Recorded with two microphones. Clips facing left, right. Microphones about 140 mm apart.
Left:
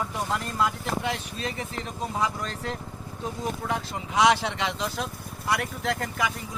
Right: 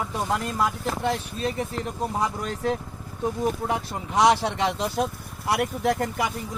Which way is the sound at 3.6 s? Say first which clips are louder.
Right 3 dB; 35° right (ahead or behind).